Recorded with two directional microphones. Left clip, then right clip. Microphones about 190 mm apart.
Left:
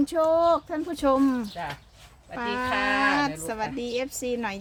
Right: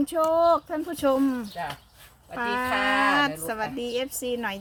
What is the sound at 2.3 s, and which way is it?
Speech, 10° right (ahead or behind).